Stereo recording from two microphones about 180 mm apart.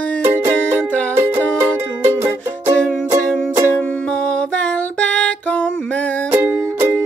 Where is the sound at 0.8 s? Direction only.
10° left (ahead or behind).